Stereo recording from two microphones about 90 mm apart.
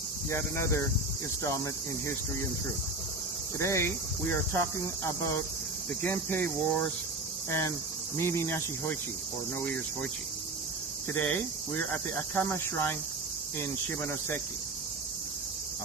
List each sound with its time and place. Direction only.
0.3 s speech: 30° left (ahead or behind)
3.6 s cricket: 30° left (ahead or behind)
6.0 s cricket: 20° left (ahead or behind)
8.2 s cricket: 30° left (ahead or behind)
11.1 s cricket: 15° left (ahead or behind)
11.7 s cricket: 30° left (ahead or behind)